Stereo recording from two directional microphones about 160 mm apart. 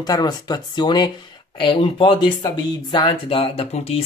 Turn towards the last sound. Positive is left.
turn(degrees=40)  # may be behind; listen again after turning